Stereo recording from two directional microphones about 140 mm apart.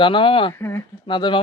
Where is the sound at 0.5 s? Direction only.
15° left (ahead or behind).